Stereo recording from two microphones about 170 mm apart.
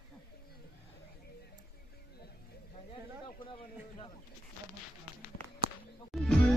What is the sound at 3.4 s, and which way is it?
Speech, 30° left (ahead or behind).